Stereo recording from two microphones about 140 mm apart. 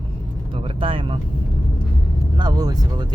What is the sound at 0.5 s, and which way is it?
Speech, 40° right (ahead or behind).